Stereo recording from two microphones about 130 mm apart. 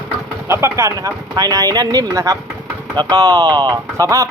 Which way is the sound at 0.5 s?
20° right (ahead or behind).